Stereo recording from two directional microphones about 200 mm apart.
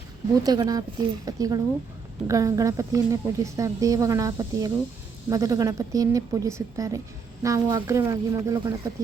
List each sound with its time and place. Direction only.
0.4 s speech: 20° right (ahead or behind)